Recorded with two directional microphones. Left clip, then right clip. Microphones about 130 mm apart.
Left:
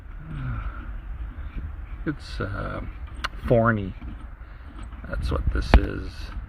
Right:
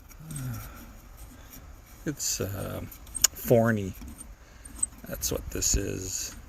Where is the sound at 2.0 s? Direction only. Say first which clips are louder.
Even; 45° right (ahead or behind).